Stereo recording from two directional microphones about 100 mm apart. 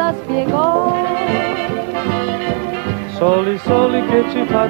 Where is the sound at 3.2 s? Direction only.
25° left (ahead or behind).